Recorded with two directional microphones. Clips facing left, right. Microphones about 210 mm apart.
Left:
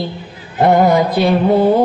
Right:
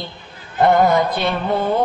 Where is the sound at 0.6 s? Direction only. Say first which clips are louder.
Left 3 dB; 15° left (ahead or behind).